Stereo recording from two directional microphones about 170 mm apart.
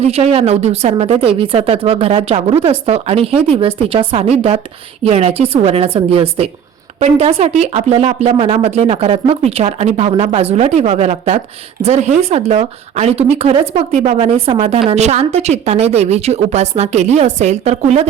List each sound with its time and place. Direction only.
0.0 s speech: 35° right (ahead or behind)